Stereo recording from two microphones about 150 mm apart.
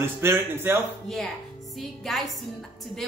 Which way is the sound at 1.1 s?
5° left (ahead or behind).